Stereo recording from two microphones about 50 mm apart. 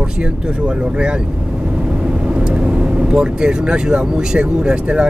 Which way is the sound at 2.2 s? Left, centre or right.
Right.